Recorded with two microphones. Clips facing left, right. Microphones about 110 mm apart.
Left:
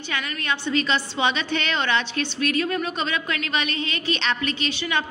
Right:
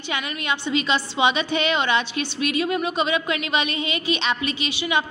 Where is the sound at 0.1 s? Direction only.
15° right (ahead or behind).